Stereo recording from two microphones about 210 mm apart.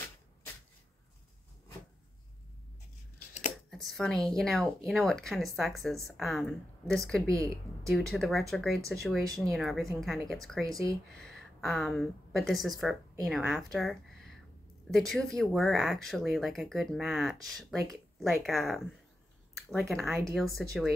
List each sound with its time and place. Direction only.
3.8 s speech: centre (ahead or behind)
7.2 s a woman's voice: 15° right (ahead or behind)
7.9 s speech: centre (ahead or behind)
10.7 s a woman's voice: 15° right (ahead or behind)
11.1 s a woman's voice: centre (ahead or behind)